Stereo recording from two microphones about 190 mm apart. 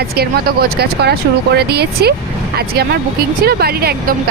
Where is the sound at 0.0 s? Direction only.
55° right (ahead or behind).